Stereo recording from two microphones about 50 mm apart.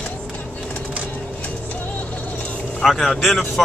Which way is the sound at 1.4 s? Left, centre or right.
Left.